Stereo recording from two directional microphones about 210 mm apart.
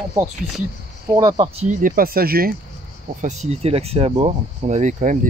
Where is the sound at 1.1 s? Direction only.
20° right (ahead or behind); by 2.5 s 45° right (ahead or behind).